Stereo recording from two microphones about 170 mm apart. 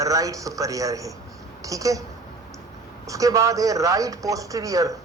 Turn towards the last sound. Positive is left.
turn(degrees=-20)  # may be behind; listen again after turning